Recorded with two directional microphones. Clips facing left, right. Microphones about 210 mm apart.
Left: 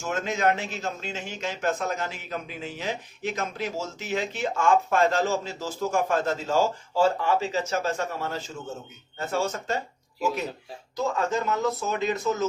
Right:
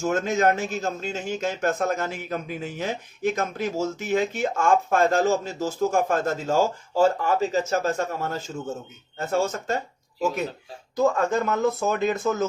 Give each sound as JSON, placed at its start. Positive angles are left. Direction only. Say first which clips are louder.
{"t": 0.0, "sound": "a man's voice", "louder": "right 4 dB", "side_deg": -45}
{"t": 10.9, "sound": "a man's voice", "louder": "right 5 dB", "side_deg": -50}